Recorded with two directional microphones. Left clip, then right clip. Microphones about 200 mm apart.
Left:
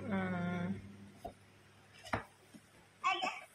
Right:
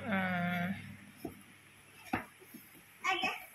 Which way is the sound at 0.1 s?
15° left (ahead or behind).